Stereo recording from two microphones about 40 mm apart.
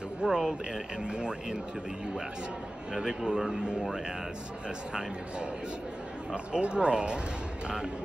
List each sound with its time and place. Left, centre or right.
0.2 s a man's voice: centre
2.9 s a man's voice: centre
6.3 s speech: right